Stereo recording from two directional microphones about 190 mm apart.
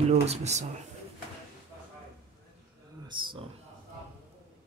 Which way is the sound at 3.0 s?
25° right (ahead or behind).